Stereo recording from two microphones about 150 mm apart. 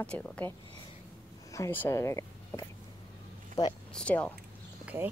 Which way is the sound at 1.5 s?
15° left (ahead or behind).